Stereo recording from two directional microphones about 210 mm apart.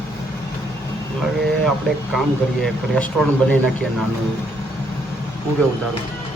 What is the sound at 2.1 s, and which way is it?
Speech, centre (ahead or behind).